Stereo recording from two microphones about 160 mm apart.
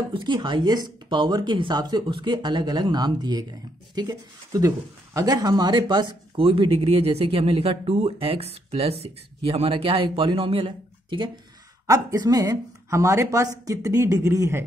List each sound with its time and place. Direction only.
0.1 s speech: 30° right (ahead or behind)